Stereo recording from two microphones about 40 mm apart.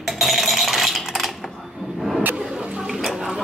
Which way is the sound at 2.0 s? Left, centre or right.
Centre.